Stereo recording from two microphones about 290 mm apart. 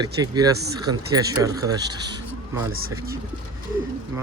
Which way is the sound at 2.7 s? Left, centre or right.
Right.